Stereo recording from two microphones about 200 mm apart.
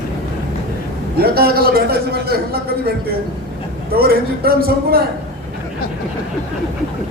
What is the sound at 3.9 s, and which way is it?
A man's voice, 50° right (ahead or behind).